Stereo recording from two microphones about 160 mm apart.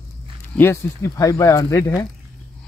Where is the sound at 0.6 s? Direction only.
15° left (ahead or behind).